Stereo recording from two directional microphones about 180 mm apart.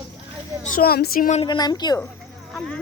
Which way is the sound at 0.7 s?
60° left (ahead or behind).